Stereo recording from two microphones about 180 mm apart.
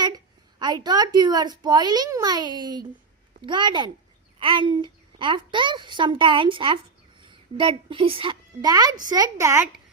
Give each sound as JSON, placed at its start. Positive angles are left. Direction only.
{"t": 0.6, "sound": "a child's voice", "side_deg": -25}